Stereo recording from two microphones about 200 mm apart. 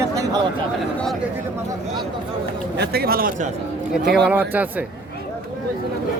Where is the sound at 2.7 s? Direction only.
50° right (ahead or behind).